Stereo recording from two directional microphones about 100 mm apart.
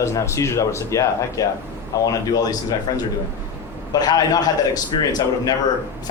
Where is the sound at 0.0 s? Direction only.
30° left (ahead or behind).